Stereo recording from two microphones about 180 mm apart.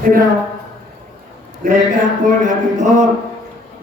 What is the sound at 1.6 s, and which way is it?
Speech, 50° right (ahead or behind).